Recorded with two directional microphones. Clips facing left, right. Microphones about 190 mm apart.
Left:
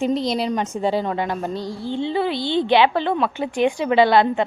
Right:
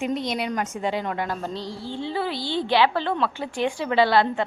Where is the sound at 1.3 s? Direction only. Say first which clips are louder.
Left 5 dB; 15° left (ahead or behind).